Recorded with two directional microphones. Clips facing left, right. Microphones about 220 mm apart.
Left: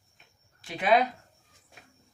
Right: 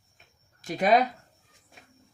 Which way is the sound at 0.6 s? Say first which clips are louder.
Right 2 dB; 40° right (ahead or behind).